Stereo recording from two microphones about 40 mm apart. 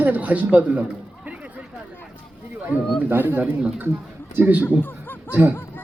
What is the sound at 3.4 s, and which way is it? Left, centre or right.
Speech, right.